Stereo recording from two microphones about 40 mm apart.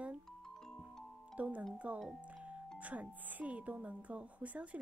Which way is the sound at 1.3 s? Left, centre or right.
Right.